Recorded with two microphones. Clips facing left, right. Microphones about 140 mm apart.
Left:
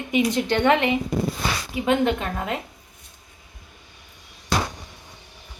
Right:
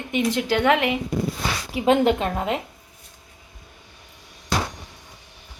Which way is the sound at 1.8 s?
30° right (ahead or behind).